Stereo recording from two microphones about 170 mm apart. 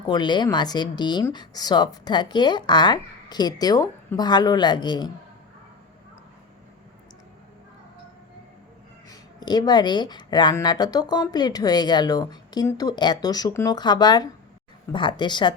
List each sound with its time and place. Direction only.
0.1 s speech: 25° left (ahead or behind)
9.0 s speech: 25° left (ahead or behind)